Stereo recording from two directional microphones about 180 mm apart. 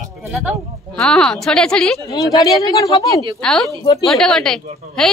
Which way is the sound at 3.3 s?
5° left (ahead or behind).